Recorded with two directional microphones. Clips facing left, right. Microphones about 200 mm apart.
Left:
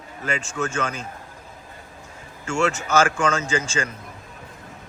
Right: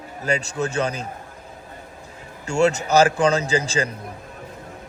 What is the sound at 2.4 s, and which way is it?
A man's voice, 40° right (ahead or behind).